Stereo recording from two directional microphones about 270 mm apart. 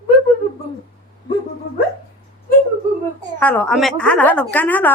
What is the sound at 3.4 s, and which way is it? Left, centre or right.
Speech, centre.